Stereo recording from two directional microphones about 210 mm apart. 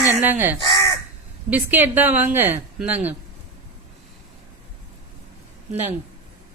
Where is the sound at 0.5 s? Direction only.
25° left (ahead or behind).